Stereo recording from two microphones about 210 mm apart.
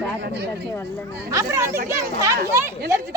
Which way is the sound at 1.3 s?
15° right (ahead or behind).